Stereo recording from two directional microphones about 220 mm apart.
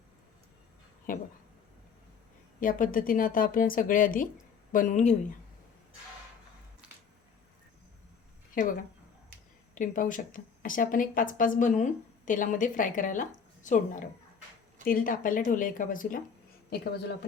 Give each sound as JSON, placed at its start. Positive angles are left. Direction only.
{"t": 1.1, "sound": "speech", "side_deg": 40}
{"t": 2.6, "sound": "speech", "side_deg": 40}
{"t": 6.8, "sound": "a sound", "side_deg": -5}
{"t": 8.6, "sound": "speech", "side_deg": 40}
{"t": 9.7, "sound": "a woman's voice", "side_deg": 35}